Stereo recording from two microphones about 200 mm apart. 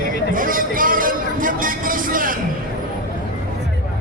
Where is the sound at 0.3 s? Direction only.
45° right (ahead or behind).